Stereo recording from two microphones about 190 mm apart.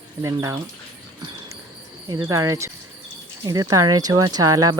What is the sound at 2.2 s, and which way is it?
Speech, 15° right (ahead or behind).